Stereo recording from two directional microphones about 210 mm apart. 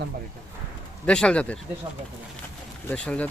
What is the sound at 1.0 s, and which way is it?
Speech, 5° left (ahead or behind).